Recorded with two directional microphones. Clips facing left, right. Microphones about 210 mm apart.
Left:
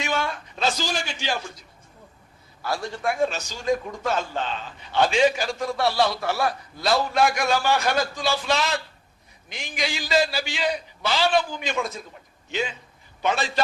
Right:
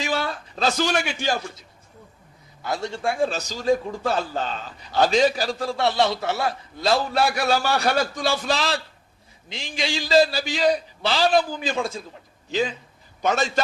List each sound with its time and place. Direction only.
0.0 s a sound: 35° right (ahead or behind)
0.8 s a man's voice: 65° right (ahead or behind)
2.6 s a man's voice: 20° right (ahead or behind); by 13.5 s 45° right (ahead or behind)